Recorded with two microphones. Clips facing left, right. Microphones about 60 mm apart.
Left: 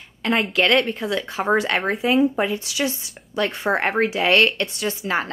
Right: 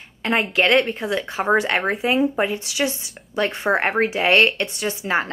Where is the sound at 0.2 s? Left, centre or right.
Right.